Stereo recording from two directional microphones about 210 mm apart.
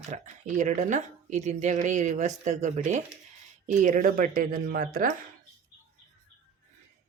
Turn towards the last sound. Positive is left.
turn(degrees=-40)  # may be behind; listen again after turning